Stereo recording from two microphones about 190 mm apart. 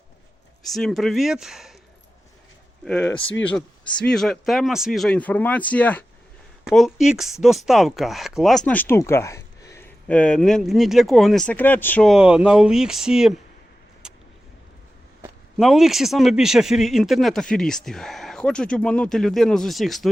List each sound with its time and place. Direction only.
0.7 s speech: centre (ahead or behind)
2.8 s speech: 5° left (ahead or behind)
14.0 s vehicle: 5° right (ahead or behind)
15.5 s speech: centre (ahead or behind)